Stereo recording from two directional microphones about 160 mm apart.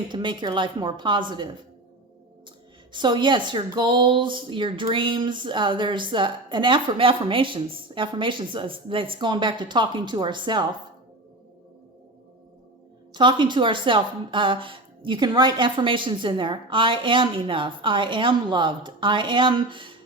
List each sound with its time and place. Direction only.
0.1 s speech: 30° right (ahead or behind)
2.9 s a woman's voice: 30° right (ahead or behind)
13.1 s a woman's voice: 30° right (ahead or behind)